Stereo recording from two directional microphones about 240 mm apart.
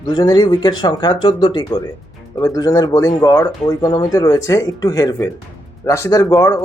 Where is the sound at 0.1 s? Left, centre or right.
Centre.